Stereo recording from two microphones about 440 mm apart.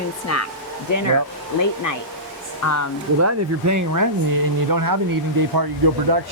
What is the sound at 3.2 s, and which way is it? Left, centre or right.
Speech, right.